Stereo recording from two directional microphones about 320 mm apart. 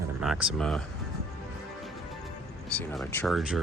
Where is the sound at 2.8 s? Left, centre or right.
Centre.